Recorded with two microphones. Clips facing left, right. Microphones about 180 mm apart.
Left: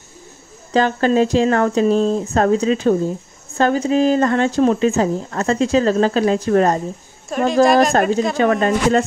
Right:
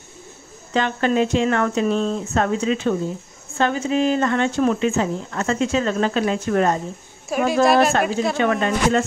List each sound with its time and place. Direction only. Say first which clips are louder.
0.7 s speech: left 4 dB; 35° left (ahead or behind)
7.2 s a woman's voice: left 3 dB; 5° right (ahead or behind)
8.4 s speech: left 3 dB; 40° left (ahead or behind)